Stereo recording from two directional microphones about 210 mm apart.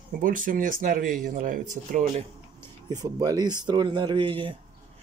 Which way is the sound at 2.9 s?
20° right (ahead or behind).